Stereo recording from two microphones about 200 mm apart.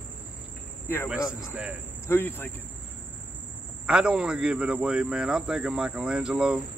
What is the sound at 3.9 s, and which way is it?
Speech, 5° right (ahead or behind).